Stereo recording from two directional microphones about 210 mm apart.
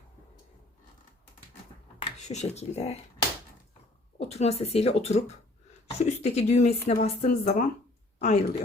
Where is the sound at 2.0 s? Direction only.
30° left (ahead or behind).